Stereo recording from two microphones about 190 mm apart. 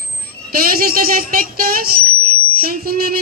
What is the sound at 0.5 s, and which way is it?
Speech, 50° right (ahead or behind).